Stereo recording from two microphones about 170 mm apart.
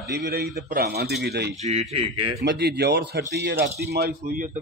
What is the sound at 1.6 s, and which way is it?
Speech, 40° right (ahead or behind).